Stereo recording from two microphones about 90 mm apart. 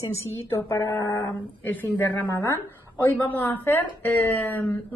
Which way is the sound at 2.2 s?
35° left (ahead or behind).